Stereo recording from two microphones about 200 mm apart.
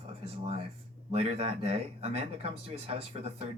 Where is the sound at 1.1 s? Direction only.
30° right (ahead or behind).